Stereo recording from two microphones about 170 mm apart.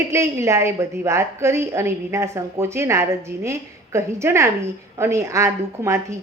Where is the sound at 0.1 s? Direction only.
15° right (ahead or behind).